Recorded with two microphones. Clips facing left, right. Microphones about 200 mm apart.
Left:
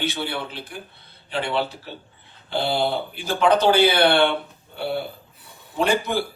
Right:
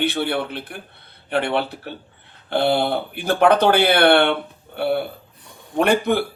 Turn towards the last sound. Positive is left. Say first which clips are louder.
# right 4 dB
turn(degrees=-60)  # may be behind; listen again after turning